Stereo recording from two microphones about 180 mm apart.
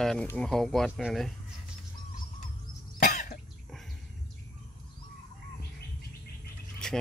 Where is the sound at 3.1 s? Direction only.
40° left (ahead or behind).